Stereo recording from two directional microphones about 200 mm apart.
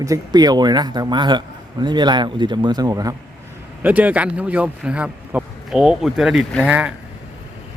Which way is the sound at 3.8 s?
10° right (ahead or behind).